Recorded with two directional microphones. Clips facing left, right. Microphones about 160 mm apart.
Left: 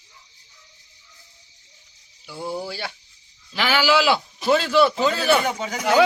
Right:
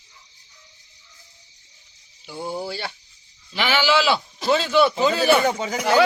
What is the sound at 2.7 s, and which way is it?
A man's voice, 5° left (ahead or behind).